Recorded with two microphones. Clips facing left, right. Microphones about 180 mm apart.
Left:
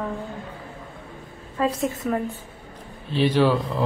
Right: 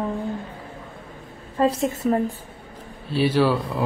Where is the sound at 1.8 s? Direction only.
30° right (ahead or behind).